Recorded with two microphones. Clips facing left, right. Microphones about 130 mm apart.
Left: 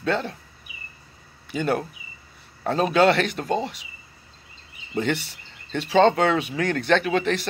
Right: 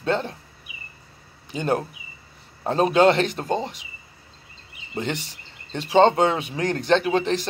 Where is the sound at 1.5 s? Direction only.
35° right (ahead or behind).